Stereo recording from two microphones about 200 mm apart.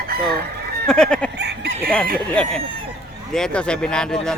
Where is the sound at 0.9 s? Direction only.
5° left (ahead or behind).